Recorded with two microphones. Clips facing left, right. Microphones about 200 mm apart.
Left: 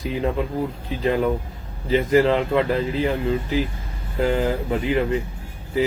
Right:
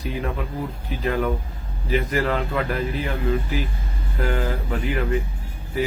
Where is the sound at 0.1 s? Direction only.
30° left (ahead or behind).